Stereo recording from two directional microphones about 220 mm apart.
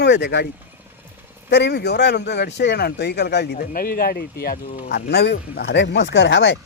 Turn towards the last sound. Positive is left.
turn(degrees=55)  # may be behind; listen again after turning